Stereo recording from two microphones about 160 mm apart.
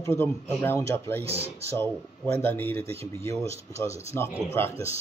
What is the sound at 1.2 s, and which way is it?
Speech, 40° right (ahead or behind).